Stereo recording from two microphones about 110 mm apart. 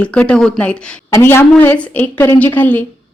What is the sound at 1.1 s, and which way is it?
A woman's voice, 20° left (ahead or behind).